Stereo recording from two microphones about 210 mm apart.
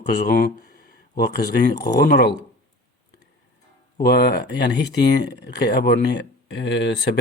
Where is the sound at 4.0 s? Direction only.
50° left (ahead or behind).